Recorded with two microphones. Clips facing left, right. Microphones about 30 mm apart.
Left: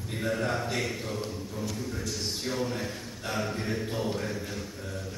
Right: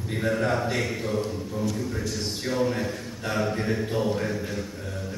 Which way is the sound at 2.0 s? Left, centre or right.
Centre.